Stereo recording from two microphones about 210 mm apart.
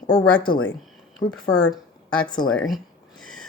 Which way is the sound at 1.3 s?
5° left (ahead or behind).